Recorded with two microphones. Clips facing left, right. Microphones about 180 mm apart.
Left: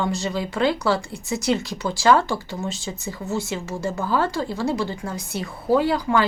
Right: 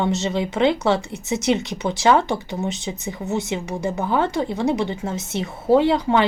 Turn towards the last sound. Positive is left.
turn(degrees=-25)  # may be behind; listen again after turning